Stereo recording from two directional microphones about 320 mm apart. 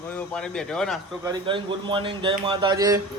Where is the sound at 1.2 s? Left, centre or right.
Centre.